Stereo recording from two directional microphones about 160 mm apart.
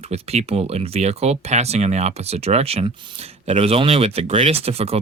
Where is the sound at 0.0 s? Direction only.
40° right (ahead or behind).